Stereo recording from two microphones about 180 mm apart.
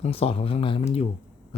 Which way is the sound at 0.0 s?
35° left (ahead or behind).